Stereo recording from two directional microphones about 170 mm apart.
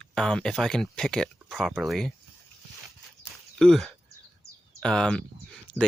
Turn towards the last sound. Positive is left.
turn(degrees=5)  # may be behind; listen again after turning